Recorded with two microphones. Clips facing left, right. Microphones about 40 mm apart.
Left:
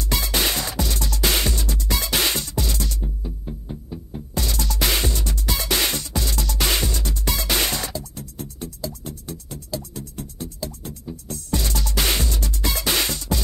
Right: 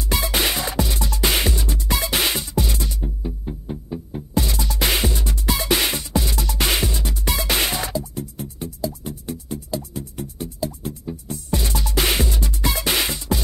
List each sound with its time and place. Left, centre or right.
0.1 s music: centre